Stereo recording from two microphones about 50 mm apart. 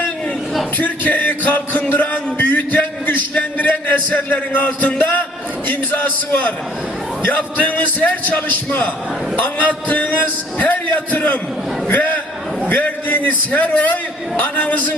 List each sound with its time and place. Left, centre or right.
0.8 s music: left
11.9 s a sound: left
12.6 s music: left